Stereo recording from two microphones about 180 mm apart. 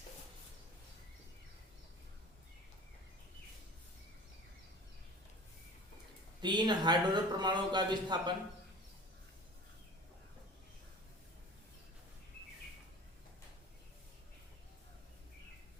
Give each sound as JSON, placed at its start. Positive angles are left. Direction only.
{"t": 6.4, "sound": "a man's voice", "side_deg": -25}